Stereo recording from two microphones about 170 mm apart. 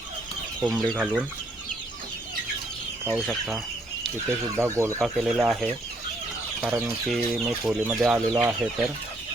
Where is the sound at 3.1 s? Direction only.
Centre (ahead or behind).